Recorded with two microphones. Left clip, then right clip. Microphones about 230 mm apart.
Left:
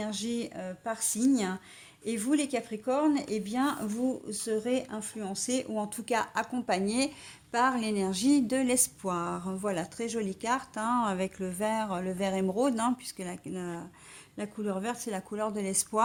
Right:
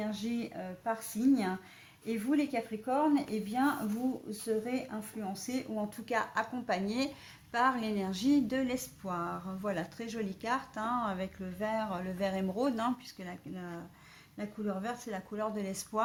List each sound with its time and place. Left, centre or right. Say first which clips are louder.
0.0 s speech: left 3 dB; left